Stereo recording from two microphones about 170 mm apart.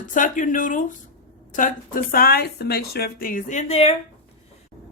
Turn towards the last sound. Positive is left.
turn(degrees=35)  # may be behind; listen again after turning